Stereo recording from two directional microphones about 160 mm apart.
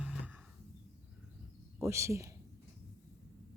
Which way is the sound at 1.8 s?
20° right (ahead or behind).